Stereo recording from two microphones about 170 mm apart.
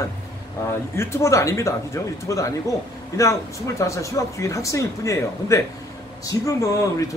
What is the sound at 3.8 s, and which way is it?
Speech, 20° left (ahead or behind).